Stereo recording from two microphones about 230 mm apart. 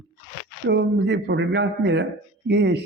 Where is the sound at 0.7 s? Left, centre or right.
Right.